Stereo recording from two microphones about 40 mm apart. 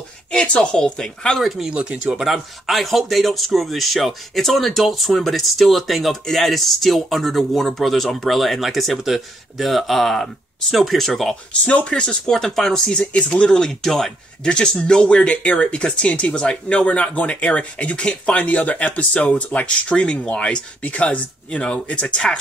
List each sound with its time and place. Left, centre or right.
0.6 s speech: left
2.6 s speech: centre
11.6 s speech: left; by 13.0 s centre
13.0 s speech: left
13.5 s speech: centre
14.4 s speech: left